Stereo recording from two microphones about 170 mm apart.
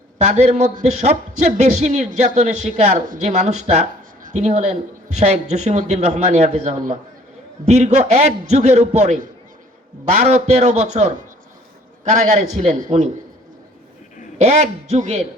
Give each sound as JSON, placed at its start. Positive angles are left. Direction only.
{"t": 0.2, "sound": "a man's voice", "side_deg": -40}
{"t": 12.1, "sound": "a man's voice", "side_deg": -40}
{"t": 14.3, "sound": "a man's voice", "side_deg": -40}